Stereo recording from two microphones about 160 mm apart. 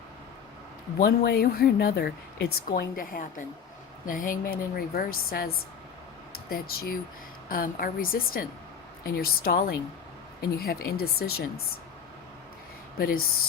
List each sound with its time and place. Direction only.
0.9 s speech: 75° left (ahead or behind)
2.9 s a woman's voice: 60° left (ahead or behind)
6.5 s a woman's voice: 65° left (ahead or behind)
13.0 s speech: 65° left (ahead or behind)